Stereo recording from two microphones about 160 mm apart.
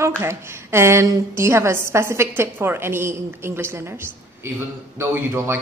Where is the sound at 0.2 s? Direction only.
15° right (ahead or behind).